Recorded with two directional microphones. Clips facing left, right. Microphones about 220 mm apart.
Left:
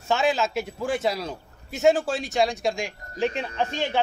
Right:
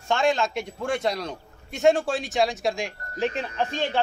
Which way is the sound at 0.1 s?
5° left (ahead or behind).